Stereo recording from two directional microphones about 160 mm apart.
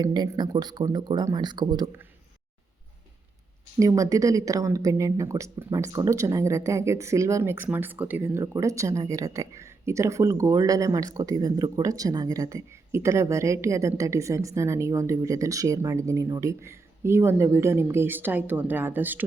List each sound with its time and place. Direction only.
0.0 s speech: 25° right (ahead or behind)
3.8 s speech: 20° right (ahead or behind)